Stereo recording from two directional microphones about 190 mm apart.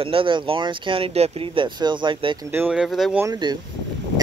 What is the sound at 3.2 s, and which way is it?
Speech, 20° right (ahead or behind).